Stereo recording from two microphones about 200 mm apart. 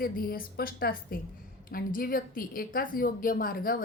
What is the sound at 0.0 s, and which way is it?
A woman's voice, 45° left (ahead or behind).